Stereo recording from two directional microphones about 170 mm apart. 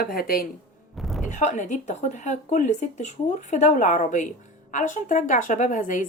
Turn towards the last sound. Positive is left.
turn(degrees=50)  # may be behind; listen again after turning